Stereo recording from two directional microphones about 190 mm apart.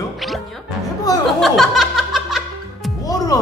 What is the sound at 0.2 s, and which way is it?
Music, centre (ahead or behind).